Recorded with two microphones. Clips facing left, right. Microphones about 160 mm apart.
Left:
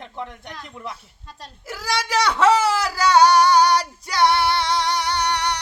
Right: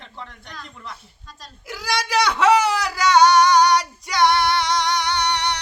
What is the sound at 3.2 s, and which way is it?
Female singing, 35° left (ahead or behind).